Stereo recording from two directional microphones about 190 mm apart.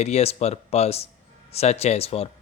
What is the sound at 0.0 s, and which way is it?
Speech, 35° left (ahead or behind).